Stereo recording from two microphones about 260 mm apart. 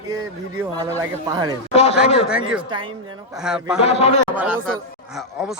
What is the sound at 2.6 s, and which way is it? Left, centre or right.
Speech, centre.